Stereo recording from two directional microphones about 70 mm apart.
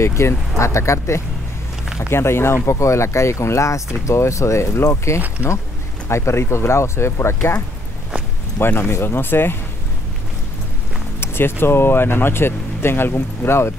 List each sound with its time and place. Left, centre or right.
0.0 s speech: left
8.5 s speech: left
11.1 s speech: left